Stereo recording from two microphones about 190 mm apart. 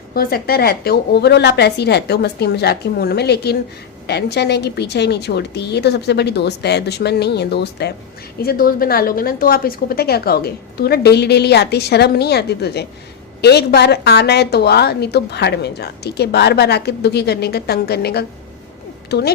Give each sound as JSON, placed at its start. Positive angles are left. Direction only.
{"t": 0.1, "sound": "a woman's voice", "side_deg": 55}
{"t": 8.4, "sound": "a woman's voice", "side_deg": 50}